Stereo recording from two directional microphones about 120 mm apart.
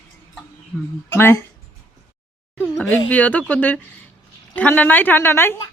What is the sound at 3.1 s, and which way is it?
Speech, 15° left (ahead or behind).